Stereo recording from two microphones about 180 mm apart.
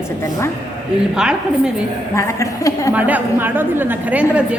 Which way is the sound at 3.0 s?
10° right (ahead or behind).